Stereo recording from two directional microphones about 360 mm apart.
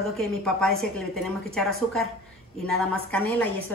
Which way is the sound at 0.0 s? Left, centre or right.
Centre.